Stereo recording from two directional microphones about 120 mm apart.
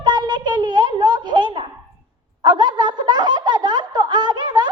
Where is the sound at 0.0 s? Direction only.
40° right (ahead or behind).